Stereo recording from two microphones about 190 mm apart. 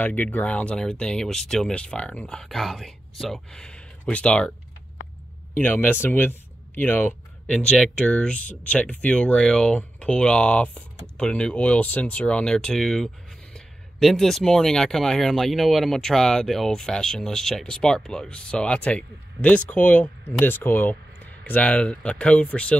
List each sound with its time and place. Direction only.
0.0 s speech: 10° left (ahead or behind)
5.5 s speech: 10° left (ahead or behind)